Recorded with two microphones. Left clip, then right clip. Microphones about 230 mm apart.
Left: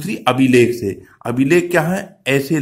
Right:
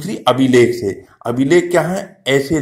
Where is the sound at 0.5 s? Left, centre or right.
Centre.